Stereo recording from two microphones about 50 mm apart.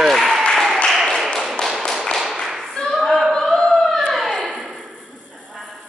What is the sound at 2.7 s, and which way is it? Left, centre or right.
Singing, centre.